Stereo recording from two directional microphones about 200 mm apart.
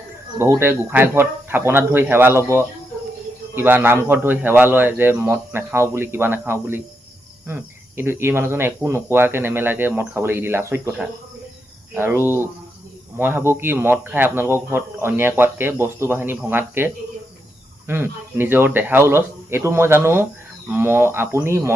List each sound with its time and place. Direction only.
0.3 s speech: 15° right (ahead or behind)
3.5 s speech: 10° right (ahead or behind)